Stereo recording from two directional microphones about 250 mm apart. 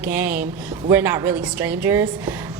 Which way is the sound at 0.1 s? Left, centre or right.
Centre.